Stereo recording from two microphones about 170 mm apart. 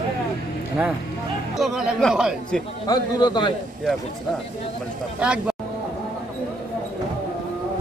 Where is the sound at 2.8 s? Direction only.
25° left (ahead or behind).